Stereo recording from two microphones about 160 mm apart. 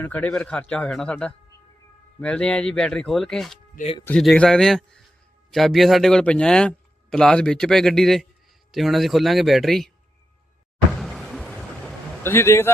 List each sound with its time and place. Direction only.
0.0 s a man's voice: 10° left (ahead or behind)
11.0 s vehicle: centre (ahead or behind)
12.2 s speech: 15° left (ahead or behind)